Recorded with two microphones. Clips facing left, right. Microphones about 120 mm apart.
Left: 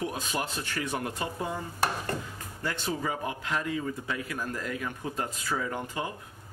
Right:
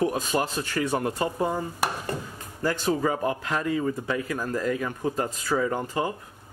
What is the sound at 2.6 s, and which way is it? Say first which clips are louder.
A man's voice: right 8 dB; 40° right (ahead or behind).